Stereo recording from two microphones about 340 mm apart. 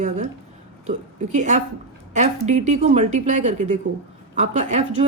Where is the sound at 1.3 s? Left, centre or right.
Right.